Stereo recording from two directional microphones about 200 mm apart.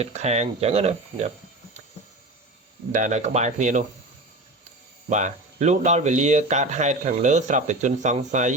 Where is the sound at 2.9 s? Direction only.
40° right (ahead or behind).